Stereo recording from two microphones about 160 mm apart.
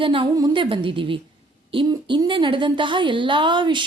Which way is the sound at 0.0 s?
35° right (ahead or behind).